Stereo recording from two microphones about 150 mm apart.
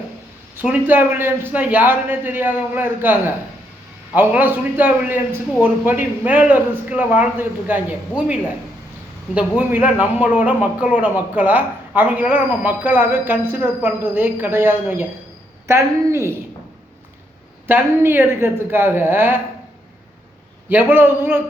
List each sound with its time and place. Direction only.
0.5 s speech: 10° right (ahead or behind)
9.3 s speech: 10° right (ahead or behind)
17.7 s speech: 15° right (ahead or behind)
20.7 s speech: 10° right (ahead or behind)